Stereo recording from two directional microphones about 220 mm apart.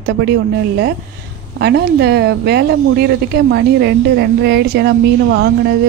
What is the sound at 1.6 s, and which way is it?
Speech, 50° right (ahead or behind).